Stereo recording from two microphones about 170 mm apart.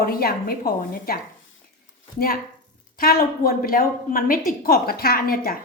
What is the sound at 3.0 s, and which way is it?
A woman's voice, 60° left (ahead or behind).